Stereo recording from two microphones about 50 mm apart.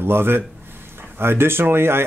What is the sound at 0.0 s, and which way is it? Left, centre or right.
Speech, right.